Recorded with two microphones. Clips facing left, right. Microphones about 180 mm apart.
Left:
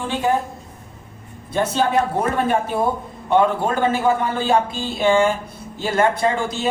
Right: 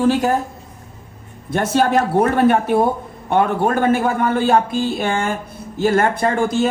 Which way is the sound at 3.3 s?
55° right (ahead or behind).